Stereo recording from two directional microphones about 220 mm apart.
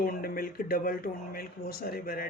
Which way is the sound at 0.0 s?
40° left (ahead or behind).